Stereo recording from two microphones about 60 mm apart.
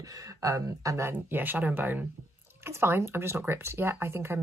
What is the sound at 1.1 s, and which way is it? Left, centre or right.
Speech, right.